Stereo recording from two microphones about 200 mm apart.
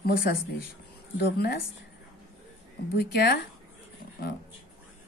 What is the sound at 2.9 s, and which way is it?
Speech, 55° left (ahead or behind).